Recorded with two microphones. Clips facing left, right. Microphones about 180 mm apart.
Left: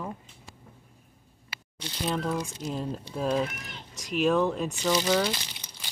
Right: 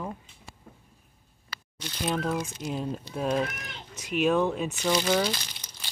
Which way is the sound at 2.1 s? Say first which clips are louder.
Right 1 dB; 5° right (ahead or behind).